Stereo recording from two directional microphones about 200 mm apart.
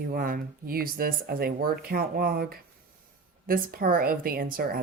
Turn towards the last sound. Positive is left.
turn(degrees=-50)  # may be behind; listen again after turning